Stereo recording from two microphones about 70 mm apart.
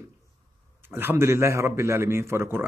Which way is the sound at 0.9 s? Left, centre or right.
Right.